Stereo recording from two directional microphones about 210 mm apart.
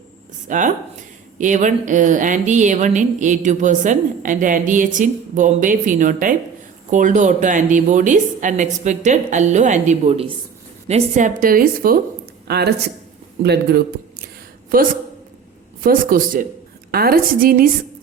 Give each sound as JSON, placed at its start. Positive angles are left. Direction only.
{"t": 0.4, "sound": "a woman's voice", "side_deg": -40}
{"t": 15.8, "sound": "a woman's voice", "side_deg": -40}